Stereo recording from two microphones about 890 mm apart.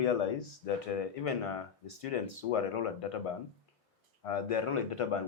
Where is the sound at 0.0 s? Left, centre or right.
Left.